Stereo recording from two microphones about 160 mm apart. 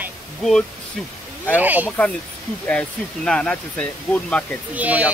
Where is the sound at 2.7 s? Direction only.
5° left (ahead or behind).